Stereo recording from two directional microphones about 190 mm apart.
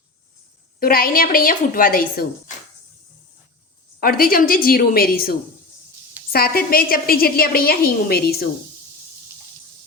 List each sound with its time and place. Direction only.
0.8 s a woman's voice: 50° left (ahead or behind)
4.0 s a woman's voice: 50° left (ahead or behind)